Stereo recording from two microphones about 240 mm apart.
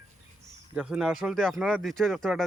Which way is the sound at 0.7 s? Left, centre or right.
Centre.